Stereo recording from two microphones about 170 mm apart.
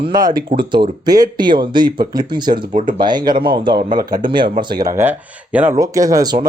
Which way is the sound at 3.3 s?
60° right (ahead or behind).